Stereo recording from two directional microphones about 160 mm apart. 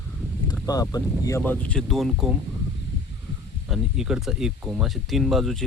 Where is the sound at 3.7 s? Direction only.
5° right (ahead or behind).